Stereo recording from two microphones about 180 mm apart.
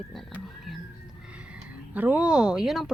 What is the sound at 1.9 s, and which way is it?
Speech, 10° right (ahead or behind).